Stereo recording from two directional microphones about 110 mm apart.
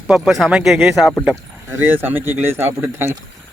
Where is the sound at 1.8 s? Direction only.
20° right (ahead or behind).